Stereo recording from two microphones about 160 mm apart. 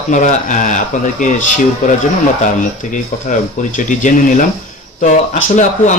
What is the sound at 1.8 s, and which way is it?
Speech, 55° left (ahead or behind).